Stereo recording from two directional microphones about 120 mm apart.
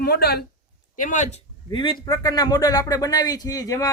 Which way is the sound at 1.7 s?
45° left (ahead or behind).